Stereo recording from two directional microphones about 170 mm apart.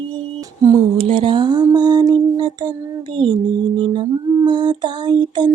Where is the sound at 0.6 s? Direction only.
20° right (ahead or behind).